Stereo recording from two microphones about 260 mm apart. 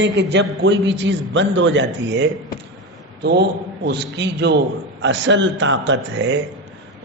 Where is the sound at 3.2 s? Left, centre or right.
Right.